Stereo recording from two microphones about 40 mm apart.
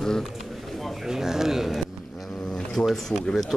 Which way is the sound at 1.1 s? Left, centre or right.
Centre.